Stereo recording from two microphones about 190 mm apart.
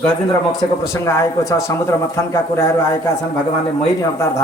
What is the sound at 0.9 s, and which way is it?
Speech, 15° left (ahead or behind).